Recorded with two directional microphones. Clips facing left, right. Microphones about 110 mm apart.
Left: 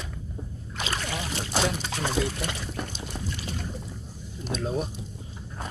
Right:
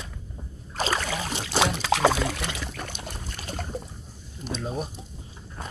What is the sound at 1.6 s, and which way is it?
Pour, 90° right.